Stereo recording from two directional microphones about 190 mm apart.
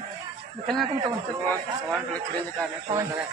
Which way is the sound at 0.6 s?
Centre (ahead or behind).